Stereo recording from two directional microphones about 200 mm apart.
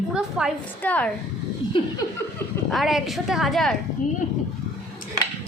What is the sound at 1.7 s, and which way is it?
Laughter, 25° left (ahead or behind).